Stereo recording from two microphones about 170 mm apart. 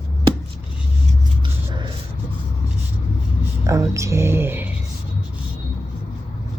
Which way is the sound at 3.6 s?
15° right (ahead or behind).